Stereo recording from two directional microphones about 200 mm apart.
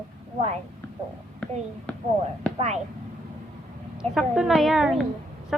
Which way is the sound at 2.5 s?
35° right (ahead or behind).